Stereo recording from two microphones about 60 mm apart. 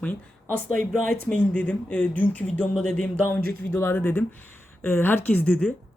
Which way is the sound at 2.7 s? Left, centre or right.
Centre.